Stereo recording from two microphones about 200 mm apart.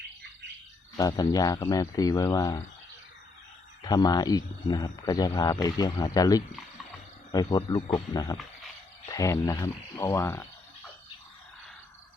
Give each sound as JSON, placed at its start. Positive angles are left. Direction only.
{"t": 0.9, "sound": "speech", "side_deg": 20}
{"t": 3.8, "sound": "speech", "side_deg": 20}